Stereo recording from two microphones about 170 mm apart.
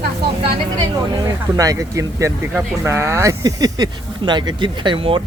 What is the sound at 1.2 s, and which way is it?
Speech, 20° right (ahead or behind).